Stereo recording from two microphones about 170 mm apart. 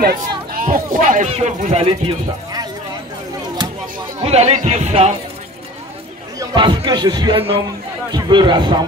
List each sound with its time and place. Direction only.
0.5 s speech: 55° right (ahead or behind); by 2.7 s 25° right (ahead or behind)
4.2 s speech: 40° right (ahead or behind)
6.4 s speech: 30° right (ahead or behind)